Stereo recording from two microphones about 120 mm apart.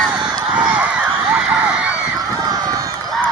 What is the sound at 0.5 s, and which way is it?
Honk, 10° right (ahead or behind).